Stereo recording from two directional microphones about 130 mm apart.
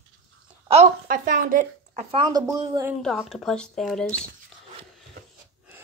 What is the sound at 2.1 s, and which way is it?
Speech, 35° right (ahead or behind).